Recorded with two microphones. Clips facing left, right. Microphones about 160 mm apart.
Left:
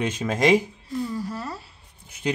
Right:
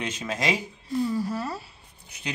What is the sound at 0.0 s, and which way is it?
Speech, 50° left (ahead or behind).